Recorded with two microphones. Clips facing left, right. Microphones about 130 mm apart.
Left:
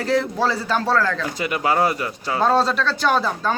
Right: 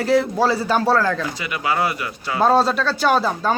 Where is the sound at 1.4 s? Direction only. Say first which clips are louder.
Left 2 dB; 40° left (ahead or behind).